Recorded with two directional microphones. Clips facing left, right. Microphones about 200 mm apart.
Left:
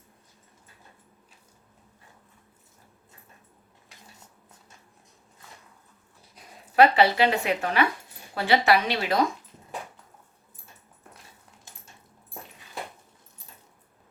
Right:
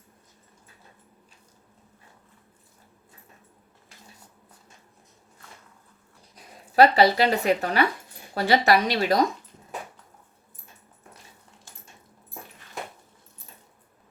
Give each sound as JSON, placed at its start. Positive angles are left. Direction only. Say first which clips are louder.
{"t": 6.7, "sound": "a woman's voice", "louder": "right 1 dB", "side_deg": -40}